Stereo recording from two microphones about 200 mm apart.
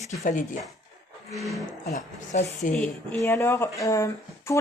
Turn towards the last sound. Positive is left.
turn(degrees=15)  # may be behind; listen again after turning